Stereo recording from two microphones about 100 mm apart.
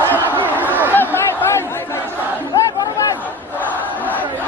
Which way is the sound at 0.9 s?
25° left (ahead or behind).